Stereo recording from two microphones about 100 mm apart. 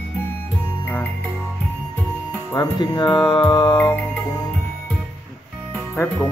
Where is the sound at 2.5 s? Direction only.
40° left (ahead or behind).